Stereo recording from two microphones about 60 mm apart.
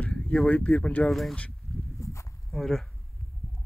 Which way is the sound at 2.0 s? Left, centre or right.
Left.